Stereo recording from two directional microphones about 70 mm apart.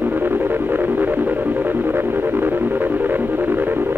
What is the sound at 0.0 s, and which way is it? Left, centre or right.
Music, right.